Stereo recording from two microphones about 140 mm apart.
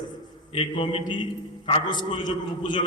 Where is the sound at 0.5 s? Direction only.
35° left (ahead or behind).